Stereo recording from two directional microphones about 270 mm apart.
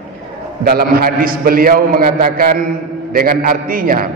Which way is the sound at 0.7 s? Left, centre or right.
Right.